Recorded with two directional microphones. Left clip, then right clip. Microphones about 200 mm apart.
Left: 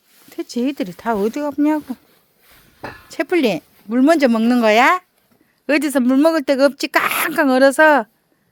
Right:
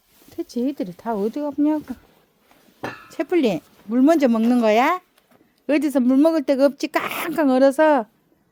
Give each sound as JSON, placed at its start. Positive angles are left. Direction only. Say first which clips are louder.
{"t": 0.3, "sound": "speech", "louder": "left 3 dB", "side_deg": 15}
{"t": 1.3, "sound": "speech", "louder": "left 3 dB", "side_deg": 10}
{"t": 3.1, "sound": "speech", "louder": "left 3 dB", "side_deg": 5}